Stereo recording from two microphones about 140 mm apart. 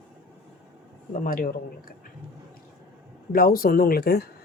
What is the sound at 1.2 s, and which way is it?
Speech, 90° left.